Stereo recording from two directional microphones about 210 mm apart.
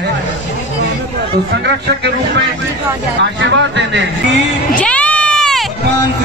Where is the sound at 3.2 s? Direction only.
60° right (ahead or behind).